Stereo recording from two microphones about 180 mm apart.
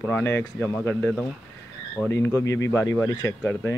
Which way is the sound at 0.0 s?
10° left (ahead or behind).